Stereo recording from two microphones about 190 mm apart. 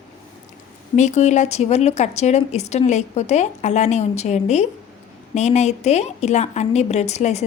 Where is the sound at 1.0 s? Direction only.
35° left (ahead or behind).